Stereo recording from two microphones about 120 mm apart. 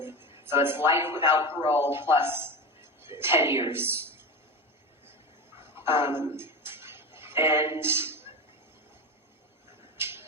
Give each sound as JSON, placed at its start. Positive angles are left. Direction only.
{"t": 0.0, "sound": "music", "side_deg": -20}
{"t": 0.4, "sound": "a man's voice", "side_deg": -20}
{"t": 5.5, "sound": "a sound", "side_deg": -20}
{"t": 10.0, "sound": "tick-tock", "side_deg": -20}